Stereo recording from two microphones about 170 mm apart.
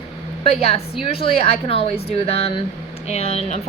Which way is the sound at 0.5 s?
35° left (ahead or behind).